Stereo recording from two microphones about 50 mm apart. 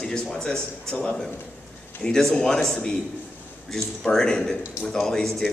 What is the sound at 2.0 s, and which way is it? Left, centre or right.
A man's voice, centre.